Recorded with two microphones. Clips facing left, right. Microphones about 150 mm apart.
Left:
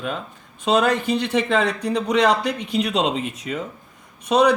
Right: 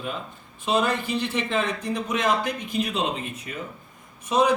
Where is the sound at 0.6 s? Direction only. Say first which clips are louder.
Left 5 dB; 75° left (ahead or behind).